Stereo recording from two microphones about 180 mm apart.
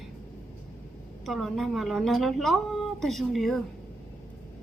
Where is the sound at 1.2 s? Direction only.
Centre (ahead or behind).